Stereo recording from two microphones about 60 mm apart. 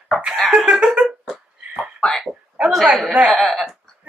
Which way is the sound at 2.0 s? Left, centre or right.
Centre.